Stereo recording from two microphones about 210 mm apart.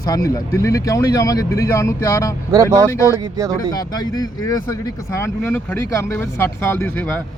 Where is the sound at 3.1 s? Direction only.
15° right (ahead or behind).